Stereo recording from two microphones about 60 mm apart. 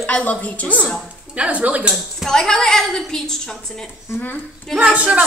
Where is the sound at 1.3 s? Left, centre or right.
Right.